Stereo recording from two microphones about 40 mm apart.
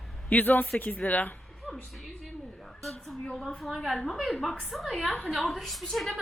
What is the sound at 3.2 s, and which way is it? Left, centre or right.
Speech, centre.